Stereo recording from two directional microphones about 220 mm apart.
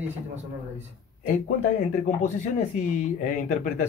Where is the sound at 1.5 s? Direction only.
35° left (ahead or behind).